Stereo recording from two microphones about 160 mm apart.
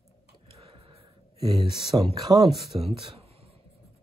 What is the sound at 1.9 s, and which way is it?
Speech, 20° right (ahead or behind).